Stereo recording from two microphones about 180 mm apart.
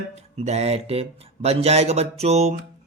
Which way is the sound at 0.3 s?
35° right (ahead or behind).